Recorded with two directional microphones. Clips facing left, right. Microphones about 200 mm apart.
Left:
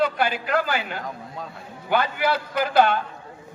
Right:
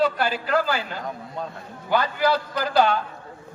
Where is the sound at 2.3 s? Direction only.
5° left (ahead or behind).